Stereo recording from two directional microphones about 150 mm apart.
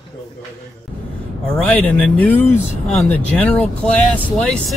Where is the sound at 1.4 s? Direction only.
5° left (ahead or behind).